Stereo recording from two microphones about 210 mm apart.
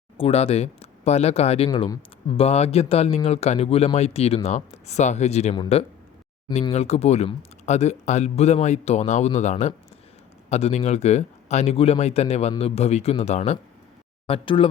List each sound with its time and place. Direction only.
0.2 s speech: 30° left (ahead or behind)